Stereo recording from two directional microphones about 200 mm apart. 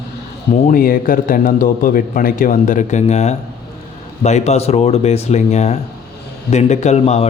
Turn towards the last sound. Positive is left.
turn(degrees=30)  # may be behind; listen again after turning